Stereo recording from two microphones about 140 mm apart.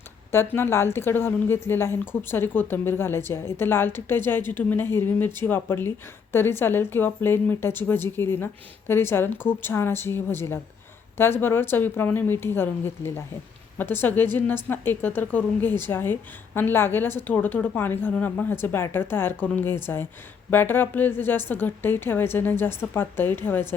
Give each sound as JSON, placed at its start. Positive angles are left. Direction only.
{"t": 0.3, "sound": "a woman's voice", "side_deg": 15}